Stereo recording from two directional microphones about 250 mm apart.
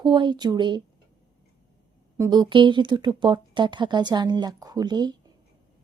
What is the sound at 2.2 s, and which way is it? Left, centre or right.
Speech, centre.